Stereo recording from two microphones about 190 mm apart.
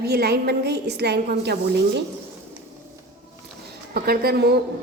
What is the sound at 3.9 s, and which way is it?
Speech, 55° right (ahead or behind).